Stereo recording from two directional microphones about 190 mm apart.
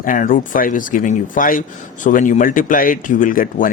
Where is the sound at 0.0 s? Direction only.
45° left (ahead or behind).